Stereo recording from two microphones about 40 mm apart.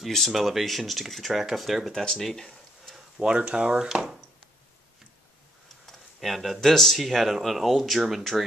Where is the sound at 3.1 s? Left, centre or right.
Right.